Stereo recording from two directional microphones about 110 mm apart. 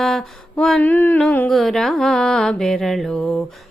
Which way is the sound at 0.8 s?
15° left (ahead or behind).